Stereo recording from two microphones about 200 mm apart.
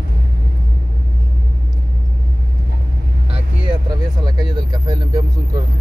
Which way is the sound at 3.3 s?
20° right (ahead or behind).